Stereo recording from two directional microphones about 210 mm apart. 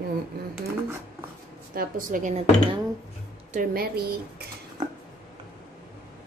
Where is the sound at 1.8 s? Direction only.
40° right (ahead or behind).